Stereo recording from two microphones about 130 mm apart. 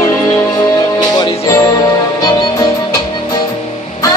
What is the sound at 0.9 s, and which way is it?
Music, 25° left (ahead or behind).